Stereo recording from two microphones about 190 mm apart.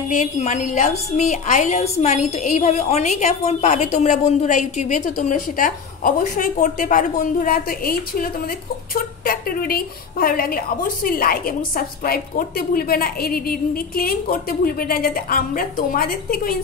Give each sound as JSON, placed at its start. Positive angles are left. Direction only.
{"t": 0.1, "sound": "a woman's voice", "side_deg": 40}